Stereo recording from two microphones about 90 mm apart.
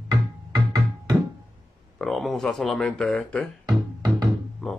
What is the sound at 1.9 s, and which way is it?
Speech, centre (ahead or behind).